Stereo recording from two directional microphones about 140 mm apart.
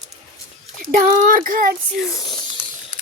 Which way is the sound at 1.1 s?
75° right (ahead or behind).